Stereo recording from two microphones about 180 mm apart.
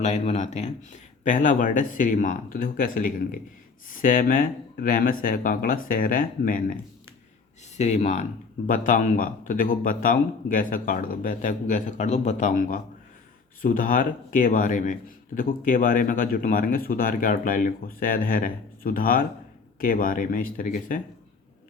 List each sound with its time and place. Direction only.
0.0 s speech: 40° left (ahead or behind)
7.8 s speech: 40° left (ahead or behind)